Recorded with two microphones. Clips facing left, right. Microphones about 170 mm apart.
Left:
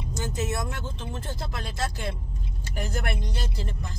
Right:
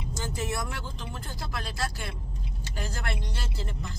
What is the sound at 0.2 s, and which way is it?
Speech, 20° left (ahead or behind).